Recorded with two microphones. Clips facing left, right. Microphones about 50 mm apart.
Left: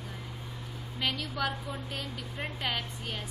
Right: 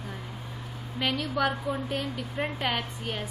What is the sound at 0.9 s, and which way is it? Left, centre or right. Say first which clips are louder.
A woman's voice: right 5 dB; right.